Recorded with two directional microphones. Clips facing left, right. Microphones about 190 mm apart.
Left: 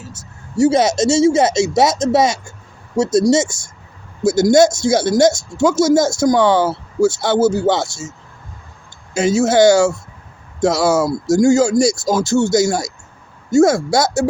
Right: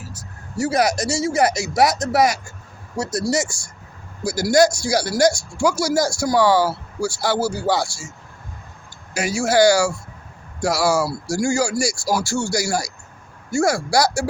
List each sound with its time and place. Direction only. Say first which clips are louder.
0.0 s speech: left 2 dB; 25° left (ahead or behind)
9.1 s speech: left 5 dB; 20° left (ahead or behind)